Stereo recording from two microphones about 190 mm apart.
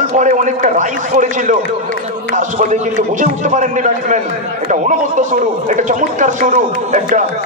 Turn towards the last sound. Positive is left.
turn(degrees=-40)  # may be behind; listen again after turning